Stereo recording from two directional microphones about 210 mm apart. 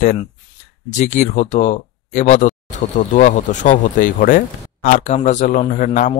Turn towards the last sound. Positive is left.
turn(degrees=35)  # may be behind; listen again after turning